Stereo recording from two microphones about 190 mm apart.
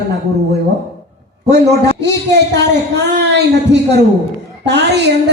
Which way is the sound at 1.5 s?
60° right (ahead or behind).